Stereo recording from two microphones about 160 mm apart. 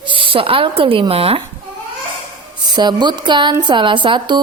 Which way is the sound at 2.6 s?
25° right (ahead or behind).